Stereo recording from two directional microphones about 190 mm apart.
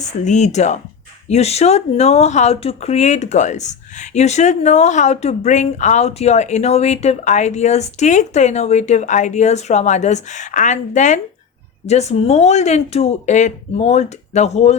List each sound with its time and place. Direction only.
0.0 s speech: 40° left (ahead or behind)